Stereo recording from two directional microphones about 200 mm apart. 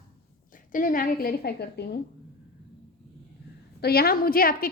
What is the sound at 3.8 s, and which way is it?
Speech, 50° left (ahead or behind).